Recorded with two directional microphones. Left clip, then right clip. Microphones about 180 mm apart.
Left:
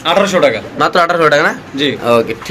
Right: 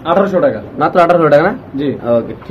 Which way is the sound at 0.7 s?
10° left (ahead or behind).